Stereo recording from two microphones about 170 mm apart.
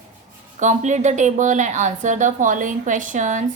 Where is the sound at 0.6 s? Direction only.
45° right (ahead or behind).